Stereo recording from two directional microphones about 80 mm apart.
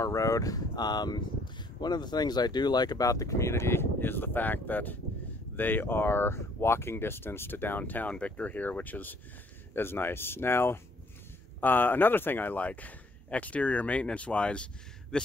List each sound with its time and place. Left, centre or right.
0.0 s speech: left; by 15.2 s centre